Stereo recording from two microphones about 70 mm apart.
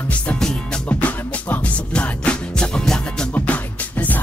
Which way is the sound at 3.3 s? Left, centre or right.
Left.